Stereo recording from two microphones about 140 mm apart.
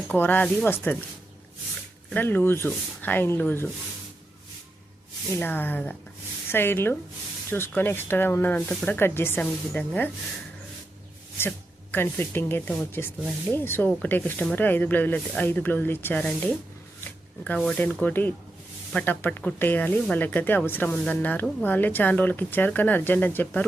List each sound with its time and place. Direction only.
0.1 s speech: 10° left (ahead or behind)
2.0 s speech: 15° left (ahead or behind)
5.4 s speech: 15° left (ahead or behind)
11.3 s speech: 15° left (ahead or behind)